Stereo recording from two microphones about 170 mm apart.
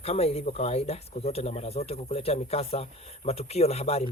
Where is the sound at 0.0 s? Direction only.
35° left (ahead or behind).